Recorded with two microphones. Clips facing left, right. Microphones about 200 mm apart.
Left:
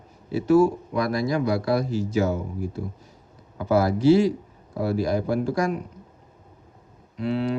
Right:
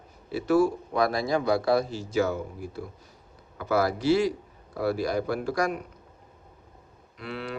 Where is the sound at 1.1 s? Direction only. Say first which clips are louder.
Left 2 dB; 25° right (ahead or behind).